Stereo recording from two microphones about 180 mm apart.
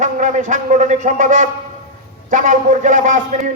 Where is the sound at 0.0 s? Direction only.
45° right (ahead or behind).